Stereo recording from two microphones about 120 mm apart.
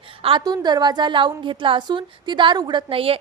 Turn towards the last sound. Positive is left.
turn(degrees=-50)  # may be behind; listen again after turning